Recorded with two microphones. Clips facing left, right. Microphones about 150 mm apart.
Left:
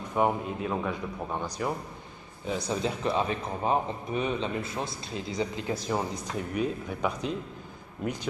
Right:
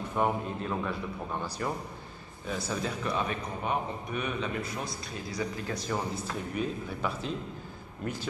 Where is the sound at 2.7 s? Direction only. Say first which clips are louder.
Left 4 dB; 25° left (ahead or behind).